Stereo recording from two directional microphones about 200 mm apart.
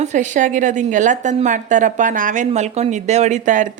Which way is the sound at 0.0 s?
35° right (ahead or behind).